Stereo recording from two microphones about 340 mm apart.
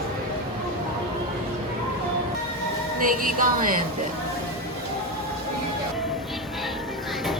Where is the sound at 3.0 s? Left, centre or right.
Right.